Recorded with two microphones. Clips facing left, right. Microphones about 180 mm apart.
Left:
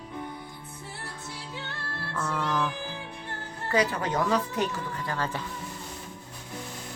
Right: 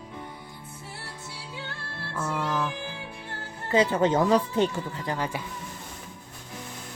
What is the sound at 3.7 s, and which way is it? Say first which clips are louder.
Speech: right 5 dB; 25° right (ahead or behind).